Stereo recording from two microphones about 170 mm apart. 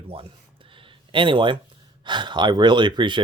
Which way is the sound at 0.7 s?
30° right (ahead or behind).